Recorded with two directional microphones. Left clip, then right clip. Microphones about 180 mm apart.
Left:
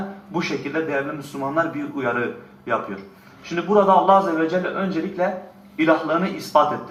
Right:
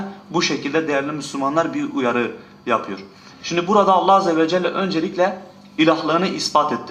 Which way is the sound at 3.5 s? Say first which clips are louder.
Right 1 dB; 20° right (ahead or behind).